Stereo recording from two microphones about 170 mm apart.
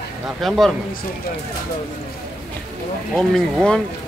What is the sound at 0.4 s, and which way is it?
Speech, centre (ahead or behind).